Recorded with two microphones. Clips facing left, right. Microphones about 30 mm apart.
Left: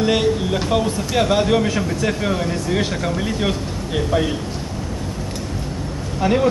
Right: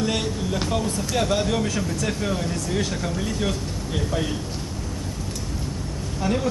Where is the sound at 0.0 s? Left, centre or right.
Left.